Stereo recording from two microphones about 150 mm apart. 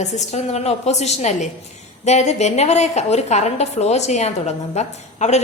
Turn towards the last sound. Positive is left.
turn(degrees=50)  # may be behind; listen again after turning